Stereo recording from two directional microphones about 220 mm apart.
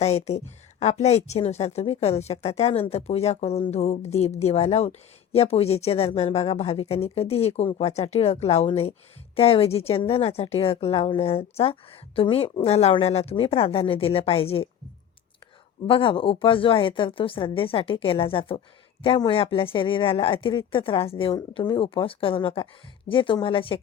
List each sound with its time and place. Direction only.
0.0 s a woman's voice: 30° left (ahead or behind)
15.9 s a woman's voice: 25° left (ahead or behind)